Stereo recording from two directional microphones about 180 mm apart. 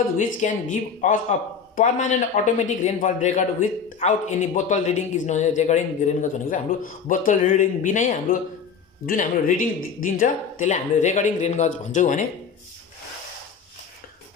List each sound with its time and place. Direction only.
0.2 s a man's voice: 45° left (ahead or behind)